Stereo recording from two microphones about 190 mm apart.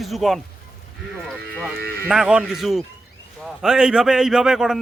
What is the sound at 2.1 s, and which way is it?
A man's voice, 5° right (ahead or behind).